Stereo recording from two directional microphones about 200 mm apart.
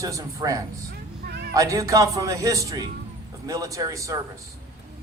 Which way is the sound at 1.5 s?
15° right (ahead or behind).